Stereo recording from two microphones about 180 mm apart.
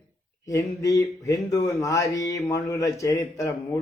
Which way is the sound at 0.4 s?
20° left (ahead or behind).